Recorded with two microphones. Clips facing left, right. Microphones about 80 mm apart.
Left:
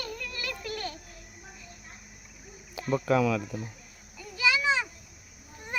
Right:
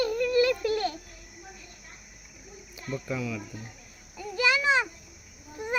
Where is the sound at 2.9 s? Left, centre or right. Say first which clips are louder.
Left 8 dB; left.